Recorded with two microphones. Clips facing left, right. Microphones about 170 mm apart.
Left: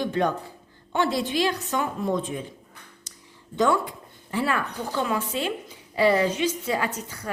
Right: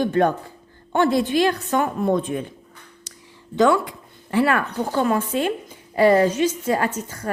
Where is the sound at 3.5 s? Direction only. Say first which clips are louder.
Right 5 dB; 85° right.